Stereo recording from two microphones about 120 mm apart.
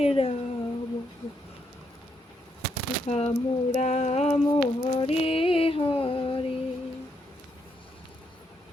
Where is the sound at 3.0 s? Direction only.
65° left (ahead or behind).